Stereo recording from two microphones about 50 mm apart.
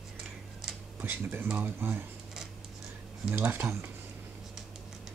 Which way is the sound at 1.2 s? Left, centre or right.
Right.